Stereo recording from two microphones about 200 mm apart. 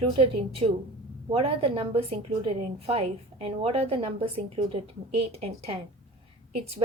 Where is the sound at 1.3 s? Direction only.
30° right (ahead or behind).